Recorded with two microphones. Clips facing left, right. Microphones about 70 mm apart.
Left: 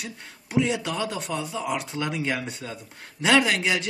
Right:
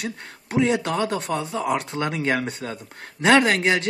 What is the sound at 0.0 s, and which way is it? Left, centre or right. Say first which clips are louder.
Speech: right 7 dB; right.